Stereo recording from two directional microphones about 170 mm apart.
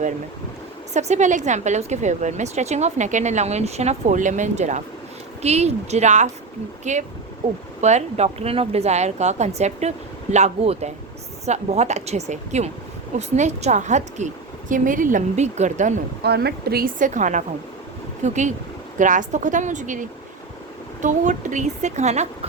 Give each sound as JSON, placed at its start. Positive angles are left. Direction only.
{"t": 0.9, "sound": "a woman's voice", "side_deg": -45}
{"t": 16.2, "sound": "a woman's voice", "side_deg": -70}